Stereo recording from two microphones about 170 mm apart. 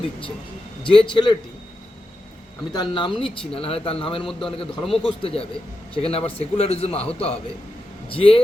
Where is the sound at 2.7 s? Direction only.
25° left (ahead or behind).